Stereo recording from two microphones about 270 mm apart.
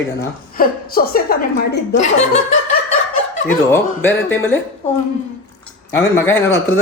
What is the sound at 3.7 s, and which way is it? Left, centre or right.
Speech, centre.